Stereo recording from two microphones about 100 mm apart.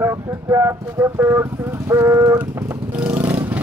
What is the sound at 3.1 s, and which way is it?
Vehicle, 15° right (ahead or behind).